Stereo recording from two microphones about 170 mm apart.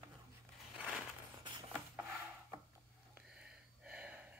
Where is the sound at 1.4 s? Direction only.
25° right (ahead or behind).